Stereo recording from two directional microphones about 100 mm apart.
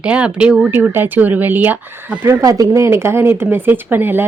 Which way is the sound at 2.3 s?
35° right (ahead or behind).